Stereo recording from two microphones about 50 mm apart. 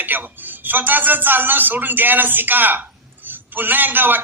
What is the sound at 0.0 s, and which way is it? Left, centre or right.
A man's voice, right.